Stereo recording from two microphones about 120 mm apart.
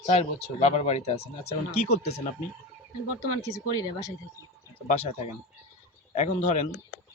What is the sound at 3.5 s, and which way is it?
Speech, 25° left (ahead or behind).